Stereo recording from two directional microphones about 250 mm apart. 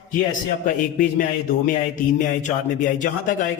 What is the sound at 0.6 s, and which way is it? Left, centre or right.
A man's voice, left.